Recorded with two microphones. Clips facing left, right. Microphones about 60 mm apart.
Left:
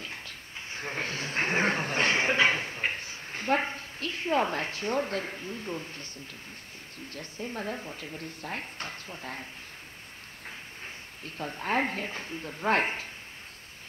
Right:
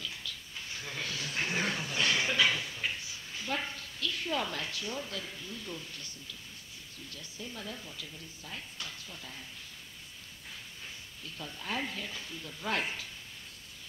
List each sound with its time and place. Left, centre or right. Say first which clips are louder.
0.0 s a sound: left 2 dB; left
7.1 s speech: left 8 dB; left
11.2 s speech: left 8 dB; left